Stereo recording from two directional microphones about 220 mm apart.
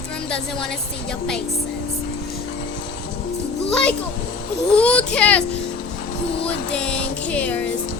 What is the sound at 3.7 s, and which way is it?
Music, 5° left (ahead or behind).